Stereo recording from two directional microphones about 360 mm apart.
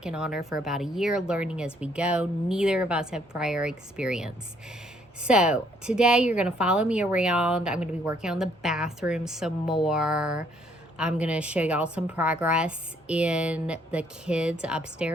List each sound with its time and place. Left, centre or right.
0.0 s speech: centre